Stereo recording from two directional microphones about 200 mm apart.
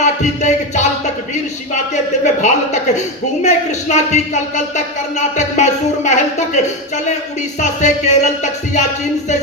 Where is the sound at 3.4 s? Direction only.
35° left (ahead or behind).